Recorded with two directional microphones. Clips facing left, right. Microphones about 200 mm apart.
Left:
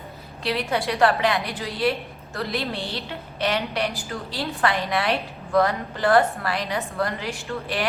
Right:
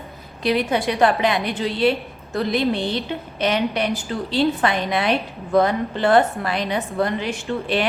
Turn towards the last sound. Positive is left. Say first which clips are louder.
# right 6 dB
turn(degrees=-25)  # may be behind; listen again after turning